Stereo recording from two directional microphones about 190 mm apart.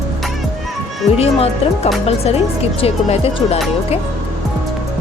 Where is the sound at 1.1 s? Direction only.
30° left (ahead or behind).